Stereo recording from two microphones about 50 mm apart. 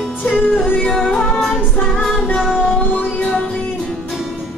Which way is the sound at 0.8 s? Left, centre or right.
Centre.